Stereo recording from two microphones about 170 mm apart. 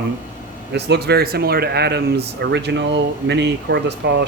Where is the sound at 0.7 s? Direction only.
80° right.